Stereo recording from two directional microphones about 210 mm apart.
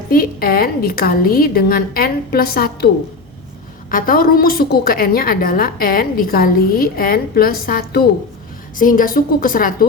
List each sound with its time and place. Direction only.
0.1 s a woman's voice: 45° left (ahead or behind)
3.9 s a woman's voice: 40° left (ahead or behind)